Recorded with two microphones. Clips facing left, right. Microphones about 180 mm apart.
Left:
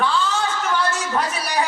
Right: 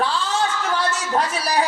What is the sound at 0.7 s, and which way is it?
Speech, 35° right (ahead or behind).